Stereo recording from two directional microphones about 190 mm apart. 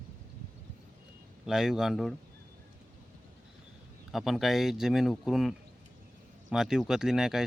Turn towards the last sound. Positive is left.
turn(degrees=0)  # may be behind; listen again after turning